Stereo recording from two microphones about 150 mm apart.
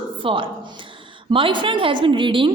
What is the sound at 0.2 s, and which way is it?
A woman's voice, 35° right (ahead or behind).